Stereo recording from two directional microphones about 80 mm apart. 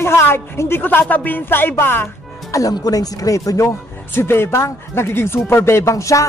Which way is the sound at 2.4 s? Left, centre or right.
Left.